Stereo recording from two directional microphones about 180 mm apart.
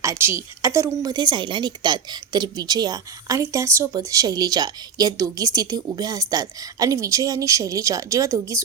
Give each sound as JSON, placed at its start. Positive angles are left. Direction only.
{"t": 0.0, "sound": "a woman's voice", "side_deg": -15}